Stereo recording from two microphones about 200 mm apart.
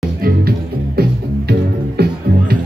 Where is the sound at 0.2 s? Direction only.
50° right (ahead or behind).